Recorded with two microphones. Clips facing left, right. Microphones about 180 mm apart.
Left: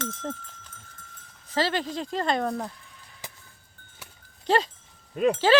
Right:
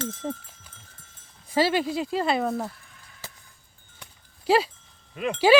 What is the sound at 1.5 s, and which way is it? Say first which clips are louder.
Speech: right 4 dB; 10° right (ahead or behind).